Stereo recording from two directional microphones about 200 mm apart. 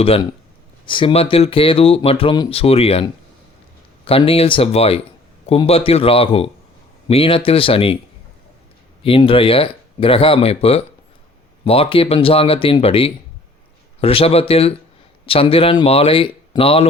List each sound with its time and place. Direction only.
0.0 s speech: 30° left (ahead or behind)
9.0 s speech: 25° left (ahead or behind)